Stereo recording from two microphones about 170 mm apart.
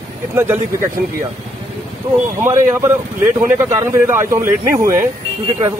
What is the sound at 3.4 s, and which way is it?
Speech, 15° right (ahead or behind).